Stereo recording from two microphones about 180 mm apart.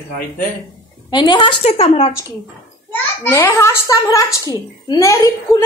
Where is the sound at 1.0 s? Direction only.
25° left (ahead or behind).